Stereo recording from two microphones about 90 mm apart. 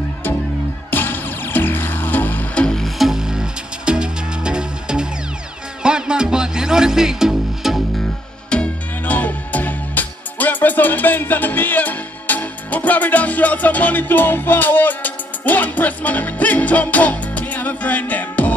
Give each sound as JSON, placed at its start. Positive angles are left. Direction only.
{"t": 0.8, "sound": "music", "side_deg": 20}
{"t": 8.5, "sound": "music", "side_deg": 15}